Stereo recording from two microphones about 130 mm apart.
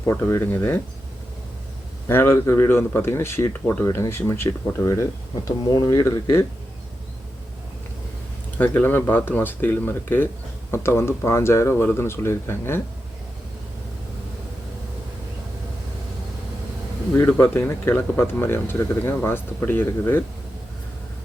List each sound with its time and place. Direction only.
0.0 s speech: 20° left (ahead or behind)
2.0 s speech: 20° left (ahead or behind)
8.5 s speech: 15° left (ahead or behind)
17.2 s speech: 15° left (ahead or behind)